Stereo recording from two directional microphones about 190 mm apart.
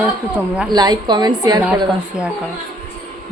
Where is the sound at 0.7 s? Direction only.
20° right (ahead or behind).